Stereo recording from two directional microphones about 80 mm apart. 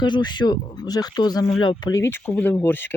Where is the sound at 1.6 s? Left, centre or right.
Left.